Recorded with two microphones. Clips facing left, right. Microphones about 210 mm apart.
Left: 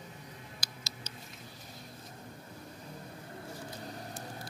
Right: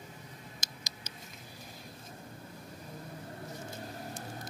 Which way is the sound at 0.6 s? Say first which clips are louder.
Left 1 dB; 20° right (ahead or behind).